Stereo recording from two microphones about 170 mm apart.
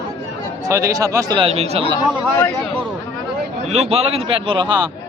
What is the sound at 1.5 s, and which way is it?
Speech, 35° right (ahead or behind).